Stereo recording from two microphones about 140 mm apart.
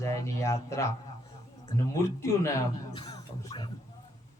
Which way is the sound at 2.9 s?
35° left (ahead or behind).